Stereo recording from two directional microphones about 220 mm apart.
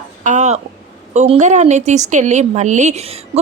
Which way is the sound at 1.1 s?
30° right (ahead or behind).